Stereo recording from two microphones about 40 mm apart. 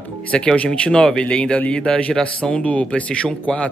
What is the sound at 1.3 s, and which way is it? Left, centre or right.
Speech, left.